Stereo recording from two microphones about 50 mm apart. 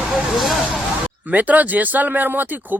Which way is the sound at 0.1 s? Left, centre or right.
Centre.